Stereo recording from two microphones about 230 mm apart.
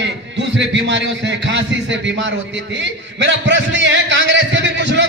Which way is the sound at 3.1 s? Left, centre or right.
Right.